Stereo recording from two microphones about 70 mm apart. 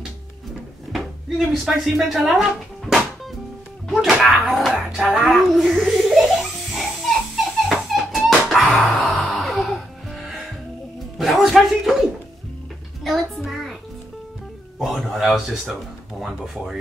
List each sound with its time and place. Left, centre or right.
1.5 s speech: centre
7.6 s music: centre
11.1 s a sound: centre
13.0 s music: centre
14.8 s speech: centre